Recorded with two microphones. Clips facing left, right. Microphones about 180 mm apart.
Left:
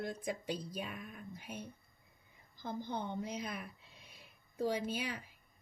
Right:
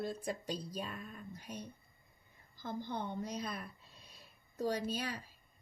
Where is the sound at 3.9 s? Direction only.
15° left (ahead or behind).